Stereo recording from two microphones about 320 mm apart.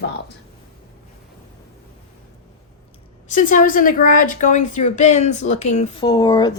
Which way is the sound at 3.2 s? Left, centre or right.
Left.